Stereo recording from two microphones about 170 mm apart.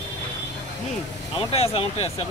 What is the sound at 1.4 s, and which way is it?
Speech, 35° left (ahead or behind).